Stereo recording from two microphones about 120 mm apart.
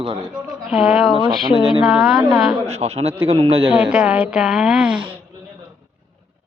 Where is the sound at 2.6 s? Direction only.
60° right (ahead or behind).